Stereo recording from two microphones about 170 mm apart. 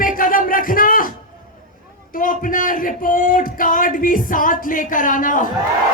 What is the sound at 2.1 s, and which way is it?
Speech, 55° left (ahead or behind).